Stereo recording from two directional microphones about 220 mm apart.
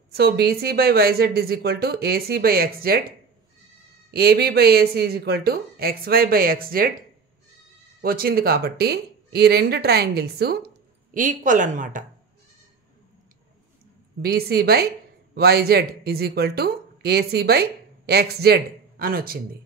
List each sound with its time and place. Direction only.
0.1 s a woman's voice: 45° right (ahead or behind)
4.1 s a woman's voice: 45° right (ahead or behind)
8.0 s a woman's voice: 45° right (ahead or behind)
11.1 s speech: 35° right (ahead or behind)
14.2 s a woman's voice: 45° right (ahead or behind)